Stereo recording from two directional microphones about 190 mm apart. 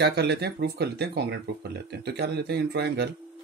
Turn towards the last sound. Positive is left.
turn(degrees=-60)  # may be behind; listen again after turning